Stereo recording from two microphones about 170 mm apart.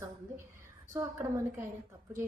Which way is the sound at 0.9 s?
15° right (ahead or behind).